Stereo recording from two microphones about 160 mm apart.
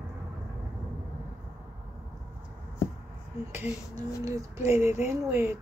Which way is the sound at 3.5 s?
15° right (ahead or behind).